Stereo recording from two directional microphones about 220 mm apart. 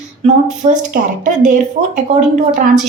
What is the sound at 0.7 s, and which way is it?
Speech, 35° right (ahead or behind).